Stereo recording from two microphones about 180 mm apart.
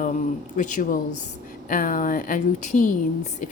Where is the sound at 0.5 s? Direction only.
45° left (ahead or behind).